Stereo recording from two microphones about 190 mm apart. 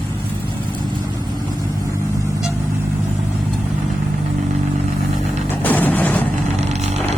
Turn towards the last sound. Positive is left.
turn(degrees=-35)  # may be behind; listen again after turning